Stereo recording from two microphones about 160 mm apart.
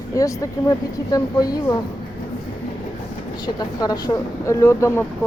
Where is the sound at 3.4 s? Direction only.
25° left (ahead or behind).